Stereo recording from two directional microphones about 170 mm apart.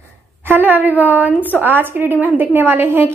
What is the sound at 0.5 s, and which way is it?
A woman's voice, 10° right (ahead or behind).